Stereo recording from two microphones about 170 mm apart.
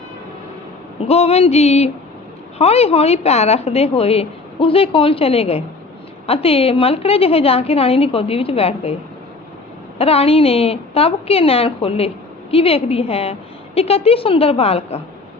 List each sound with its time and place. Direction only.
1.0 s a woman's voice: 35° left (ahead or behind)
10.0 s a woman's voice: 35° left (ahead or behind)